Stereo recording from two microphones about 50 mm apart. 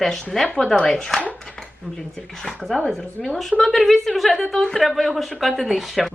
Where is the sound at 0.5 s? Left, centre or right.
Centre.